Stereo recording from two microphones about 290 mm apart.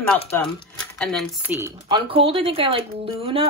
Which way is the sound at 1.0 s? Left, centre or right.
Centre.